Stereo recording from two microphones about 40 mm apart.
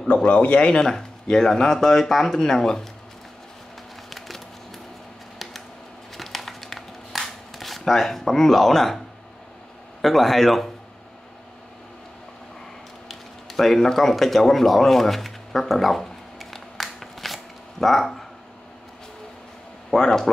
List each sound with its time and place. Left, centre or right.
0.3 s speech: left
0.6 s speech: left
6.1 s crumpling: centre
10.0 s speech: centre
13.1 s a sound: centre
20.0 s speech: centre